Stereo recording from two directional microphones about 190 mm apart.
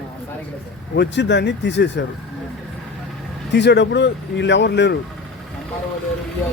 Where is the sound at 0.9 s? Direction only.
70° left (ahead or behind).